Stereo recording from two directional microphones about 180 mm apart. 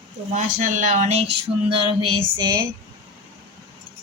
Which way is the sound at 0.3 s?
45° right (ahead or behind).